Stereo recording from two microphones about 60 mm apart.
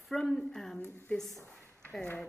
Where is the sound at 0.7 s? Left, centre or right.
Left.